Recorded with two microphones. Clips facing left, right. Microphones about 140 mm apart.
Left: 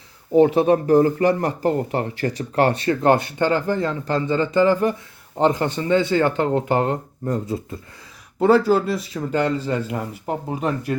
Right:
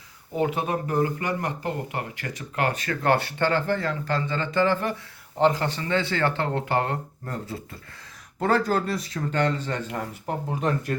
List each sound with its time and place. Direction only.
0.3 s speech: 30° left (ahead or behind)
8.4 s speech: 10° left (ahead or behind)